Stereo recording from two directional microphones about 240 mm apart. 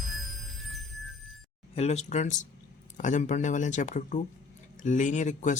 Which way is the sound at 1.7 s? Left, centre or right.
Left.